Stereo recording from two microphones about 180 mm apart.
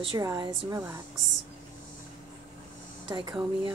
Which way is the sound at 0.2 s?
20° right (ahead or behind).